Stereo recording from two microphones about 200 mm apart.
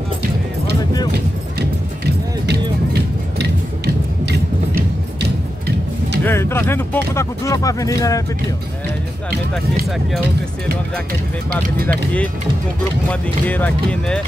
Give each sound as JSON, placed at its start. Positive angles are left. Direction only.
{"t": 2.4, "sound": "music", "side_deg": -55}
{"t": 6.2, "sound": "speech", "side_deg": 10}
{"t": 11.9, "sound": "speech", "side_deg": 5}